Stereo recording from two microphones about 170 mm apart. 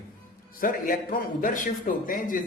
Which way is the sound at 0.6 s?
55° left (ahead or behind).